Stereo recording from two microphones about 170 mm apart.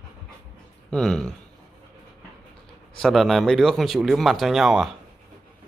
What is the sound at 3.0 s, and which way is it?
Speech, centre (ahead or behind).